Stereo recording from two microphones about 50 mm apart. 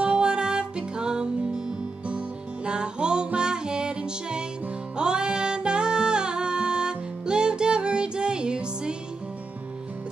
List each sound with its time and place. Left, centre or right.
0.0 s music: centre